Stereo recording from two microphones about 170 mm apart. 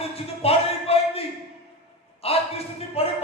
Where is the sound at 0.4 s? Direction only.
35° left (ahead or behind).